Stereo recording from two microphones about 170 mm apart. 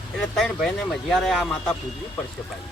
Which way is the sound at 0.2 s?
Centre (ahead or behind).